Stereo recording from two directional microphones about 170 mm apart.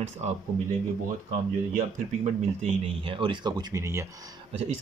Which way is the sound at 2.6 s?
30° right (ahead or behind).